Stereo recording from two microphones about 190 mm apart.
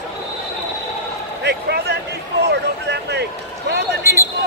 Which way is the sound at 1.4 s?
60° right (ahead or behind).